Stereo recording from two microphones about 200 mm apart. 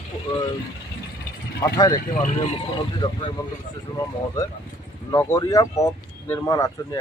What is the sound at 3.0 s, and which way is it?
Speech, 20° left (ahead or behind).